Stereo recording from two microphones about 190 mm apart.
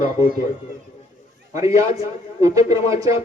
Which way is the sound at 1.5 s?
15° right (ahead or behind).